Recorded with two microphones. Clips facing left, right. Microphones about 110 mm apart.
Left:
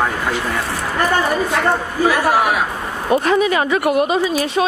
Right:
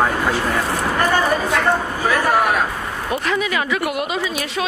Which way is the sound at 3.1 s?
35° left (ahead or behind).